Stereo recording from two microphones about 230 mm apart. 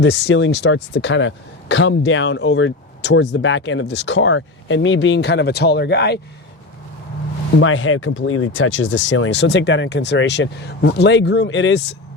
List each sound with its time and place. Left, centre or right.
0.0 s speech: left
7.6 s speech: left